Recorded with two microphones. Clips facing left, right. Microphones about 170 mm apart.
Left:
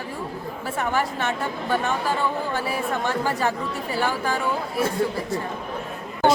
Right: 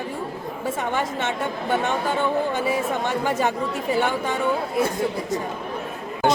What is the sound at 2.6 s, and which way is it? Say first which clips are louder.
Speech: right 2 dB; 20° right (ahead or behind).